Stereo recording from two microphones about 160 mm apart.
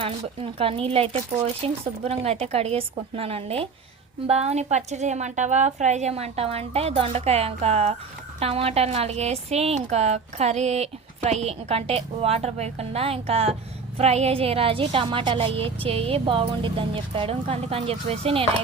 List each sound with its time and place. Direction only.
0.0 s a woman's voice: 35° right (ahead or behind)